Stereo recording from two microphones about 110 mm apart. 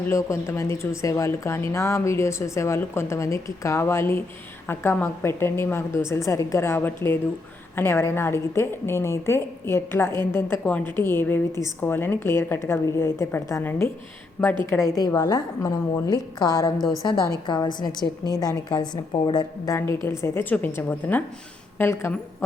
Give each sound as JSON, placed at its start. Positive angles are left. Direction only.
{"t": 0.1, "sound": "a woman's voice", "side_deg": 25}
{"t": 14.8, "sound": "a woman's voice", "side_deg": 35}
{"t": 19.7, "sound": "a woman's voice", "side_deg": 25}